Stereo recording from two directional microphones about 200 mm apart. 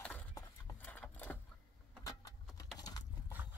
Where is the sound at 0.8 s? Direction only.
10° left (ahead or behind).